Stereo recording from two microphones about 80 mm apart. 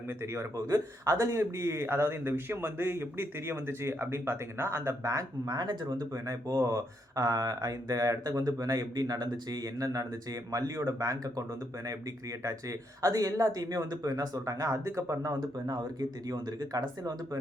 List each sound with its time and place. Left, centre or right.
0.5 s speech: right
5.5 s speech: right
6.5 s speech: right
15.6 s speech: right